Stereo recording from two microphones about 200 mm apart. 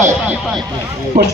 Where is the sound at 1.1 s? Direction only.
50° right (ahead or behind).